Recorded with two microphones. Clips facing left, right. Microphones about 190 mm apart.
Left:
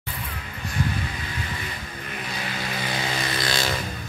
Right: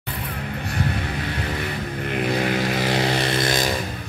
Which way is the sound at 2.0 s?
60° right (ahead or behind).